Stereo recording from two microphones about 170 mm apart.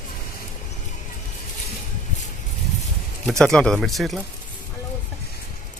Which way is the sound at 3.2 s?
Centre (ahead or behind).